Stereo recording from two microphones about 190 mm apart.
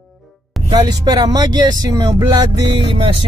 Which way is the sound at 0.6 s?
20° right (ahead or behind).